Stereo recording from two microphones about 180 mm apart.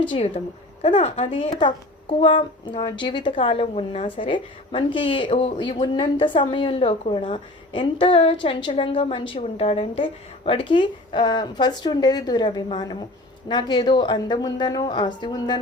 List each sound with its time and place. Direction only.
0.1 s speech: 30° left (ahead or behind)